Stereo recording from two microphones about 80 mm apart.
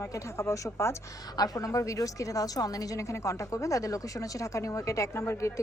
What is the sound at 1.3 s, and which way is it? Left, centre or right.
A woman's voice, left.